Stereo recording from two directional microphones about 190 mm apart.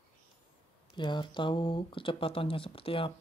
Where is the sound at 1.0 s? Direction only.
25° left (ahead or behind).